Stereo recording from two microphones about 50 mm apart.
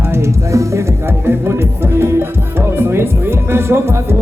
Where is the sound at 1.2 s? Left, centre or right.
Right.